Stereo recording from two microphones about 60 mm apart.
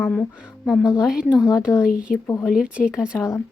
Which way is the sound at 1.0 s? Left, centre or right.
Centre.